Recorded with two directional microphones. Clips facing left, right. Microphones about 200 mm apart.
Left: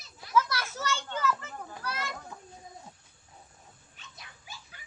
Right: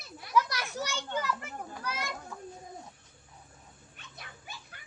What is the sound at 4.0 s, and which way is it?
Dog, 55° right (ahead or behind).